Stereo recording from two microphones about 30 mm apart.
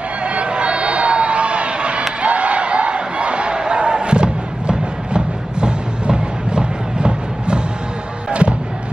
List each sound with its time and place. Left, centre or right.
0.2 s crowd: right
2.2 s a sound: right
8.3 s music: right